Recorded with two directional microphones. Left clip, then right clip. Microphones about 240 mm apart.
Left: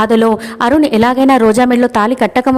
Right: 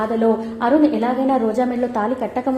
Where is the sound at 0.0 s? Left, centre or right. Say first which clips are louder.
Left 7 dB; left.